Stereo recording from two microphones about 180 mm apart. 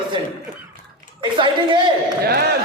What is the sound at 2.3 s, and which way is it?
Speech, 65° right (ahead or behind).